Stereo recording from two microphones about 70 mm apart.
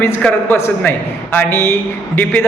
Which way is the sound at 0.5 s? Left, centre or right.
Left.